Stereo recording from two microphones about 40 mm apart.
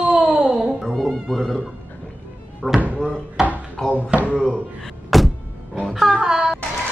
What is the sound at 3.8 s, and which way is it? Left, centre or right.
Speech, centre.